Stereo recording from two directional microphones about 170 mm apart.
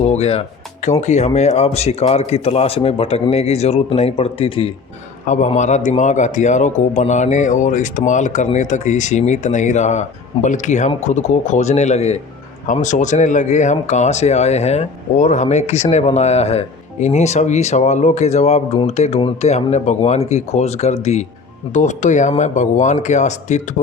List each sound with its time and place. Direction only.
0.0 s speech: 40° left (ahead or behind)
5.2 s a man's voice: 45° left (ahead or behind)